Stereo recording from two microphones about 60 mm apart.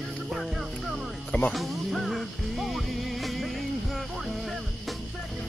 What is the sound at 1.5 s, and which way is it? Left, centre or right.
Music, centre.